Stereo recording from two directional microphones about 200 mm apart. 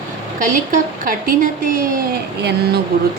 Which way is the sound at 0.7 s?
45° right (ahead or behind).